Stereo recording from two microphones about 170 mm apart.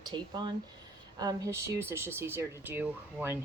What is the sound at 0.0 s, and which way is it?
Speech, 25° right (ahead or behind).